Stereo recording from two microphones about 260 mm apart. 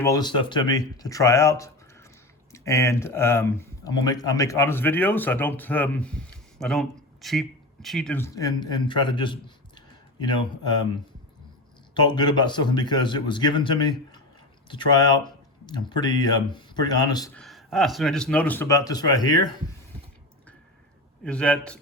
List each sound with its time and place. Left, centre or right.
0.0 s speech: centre
11.9 s speech: centre
17.4 s speech: centre
21.2 s speech: centre